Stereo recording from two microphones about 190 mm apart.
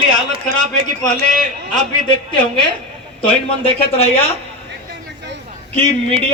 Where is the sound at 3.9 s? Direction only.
30° left (ahead or behind).